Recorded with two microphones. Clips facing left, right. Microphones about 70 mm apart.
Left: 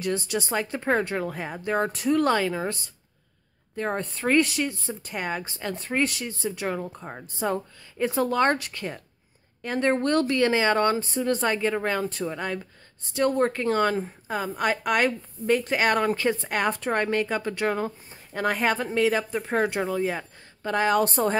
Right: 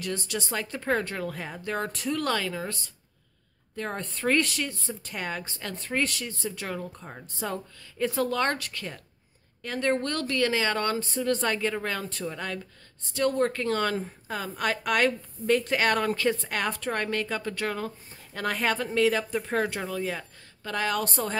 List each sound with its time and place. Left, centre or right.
0.0 s a woman's voice: centre